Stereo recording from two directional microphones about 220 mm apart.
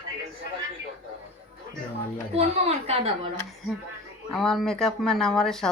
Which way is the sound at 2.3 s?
30° right (ahead or behind).